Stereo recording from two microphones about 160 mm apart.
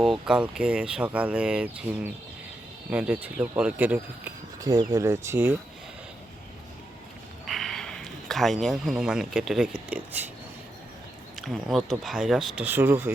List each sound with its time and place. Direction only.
0.0 s speech: 5° right (ahead or behind)
7.4 s speech: centre (ahead or behind)
11.3 s speech: centre (ahead or behind)